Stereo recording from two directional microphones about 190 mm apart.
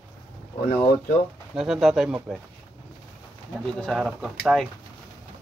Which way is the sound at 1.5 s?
Centre (ahead or behind).